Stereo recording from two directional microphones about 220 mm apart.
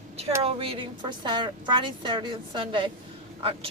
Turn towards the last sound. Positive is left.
turn(degrees=-25)  # may be behind; listen again after turning